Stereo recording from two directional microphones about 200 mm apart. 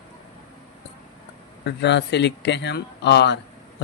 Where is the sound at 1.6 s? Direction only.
60° left (ahead or behind).